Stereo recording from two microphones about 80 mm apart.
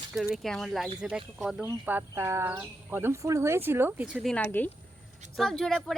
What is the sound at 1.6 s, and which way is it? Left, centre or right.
Speech, right.